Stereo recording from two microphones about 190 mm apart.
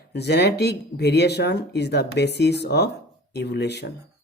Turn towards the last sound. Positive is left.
turn(degrees=60)  # may be behind; listen again after turning